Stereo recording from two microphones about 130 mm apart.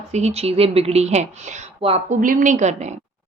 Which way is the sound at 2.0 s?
85° right.